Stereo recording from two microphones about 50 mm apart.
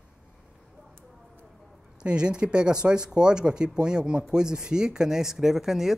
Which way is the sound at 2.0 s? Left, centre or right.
Centre.